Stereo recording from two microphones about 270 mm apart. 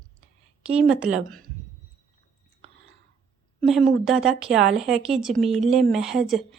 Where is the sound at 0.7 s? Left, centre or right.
Centre.